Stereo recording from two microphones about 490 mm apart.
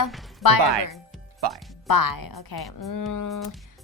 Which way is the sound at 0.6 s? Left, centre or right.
Right.